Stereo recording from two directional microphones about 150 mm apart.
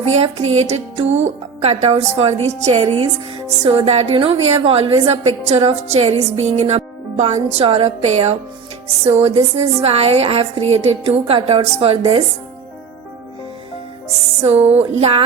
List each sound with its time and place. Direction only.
0.1 s a woman's voice: 45° right (ahead or behind)
14.7 s a woman's voice: 45° right (ahead or behind)